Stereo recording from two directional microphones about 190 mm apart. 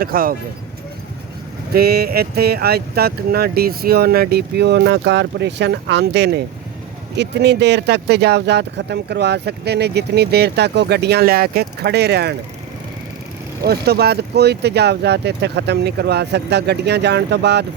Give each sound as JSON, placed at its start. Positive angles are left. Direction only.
{"t": 0.0, "sound": "speech", "side_deg": -50}
{"t": 1.7, "sound": "speech", "side_deg": -55}
{"t": 13.7, "sound": "speech", "side_deg": -55}